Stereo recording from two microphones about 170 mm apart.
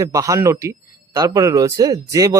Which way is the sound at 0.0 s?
20° right (ahead or behind).